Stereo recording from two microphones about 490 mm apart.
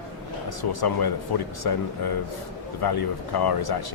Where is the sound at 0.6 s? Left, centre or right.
Left.